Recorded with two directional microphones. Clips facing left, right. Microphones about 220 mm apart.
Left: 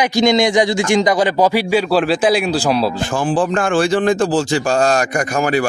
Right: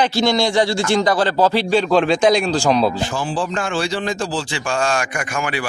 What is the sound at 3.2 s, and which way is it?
Speech, 50° left (ahead or behind).